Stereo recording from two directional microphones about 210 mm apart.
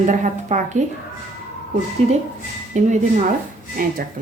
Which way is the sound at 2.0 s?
30° right (ahead or behind).